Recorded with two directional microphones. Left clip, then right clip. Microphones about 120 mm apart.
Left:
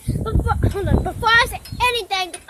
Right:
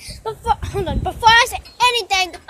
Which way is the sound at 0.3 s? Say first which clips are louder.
Right 4 dB; 10° right (ahead or behind).